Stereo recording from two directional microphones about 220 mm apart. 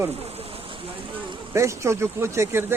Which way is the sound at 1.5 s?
15° right (ahead or behind).